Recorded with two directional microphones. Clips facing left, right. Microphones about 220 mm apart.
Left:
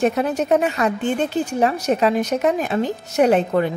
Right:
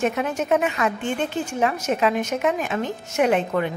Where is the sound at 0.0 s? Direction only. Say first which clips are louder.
Left 4 dB; 35° left (ahead or behind).